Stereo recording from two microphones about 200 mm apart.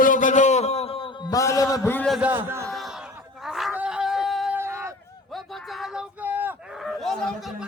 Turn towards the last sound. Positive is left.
turn(degrees=5)  # may be behind; listen again after turning